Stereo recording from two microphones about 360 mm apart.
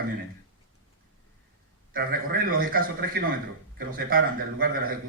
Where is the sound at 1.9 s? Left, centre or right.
Right.